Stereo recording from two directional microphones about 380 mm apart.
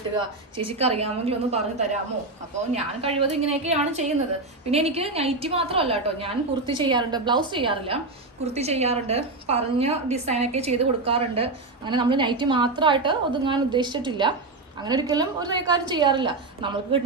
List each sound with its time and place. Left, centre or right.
0.2 s a woman's voice: centre